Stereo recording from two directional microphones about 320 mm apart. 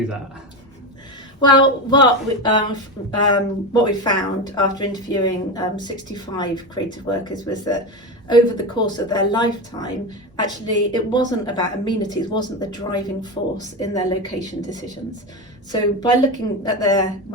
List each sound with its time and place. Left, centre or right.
1.4 s a woman's voice: centre
15.7 s a woman's voice: centre